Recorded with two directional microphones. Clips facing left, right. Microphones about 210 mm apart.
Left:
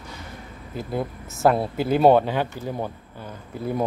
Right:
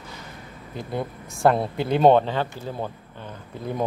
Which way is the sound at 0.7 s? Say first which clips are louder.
Left 2 dB; 5° left (ahead or behind).